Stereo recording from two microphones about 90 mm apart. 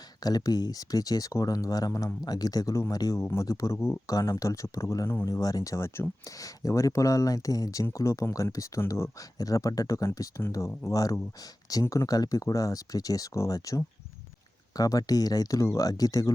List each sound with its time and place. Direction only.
0.2 s speech: 45° left (ahead or behind)
3.2 s speech: 30° left (ahead or behind)